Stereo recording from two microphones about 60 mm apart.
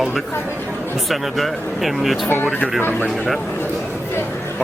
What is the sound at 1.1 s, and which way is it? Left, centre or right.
Speech, centre.